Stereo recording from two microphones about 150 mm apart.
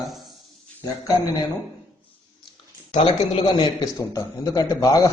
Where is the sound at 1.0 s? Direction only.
25° left (ahead or behind).